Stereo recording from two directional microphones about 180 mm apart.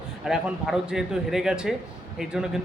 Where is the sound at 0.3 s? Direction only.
5° right (ahead or behind).